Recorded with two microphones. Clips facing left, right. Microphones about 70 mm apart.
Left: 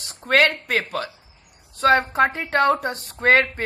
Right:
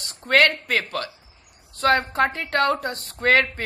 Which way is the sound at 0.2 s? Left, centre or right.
Centre.